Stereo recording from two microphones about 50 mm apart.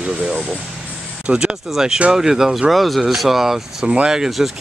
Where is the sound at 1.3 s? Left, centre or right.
Centre.